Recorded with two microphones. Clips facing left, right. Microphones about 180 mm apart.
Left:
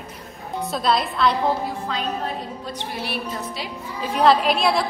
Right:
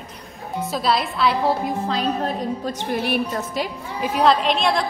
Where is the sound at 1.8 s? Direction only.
40° right (ahead or behind).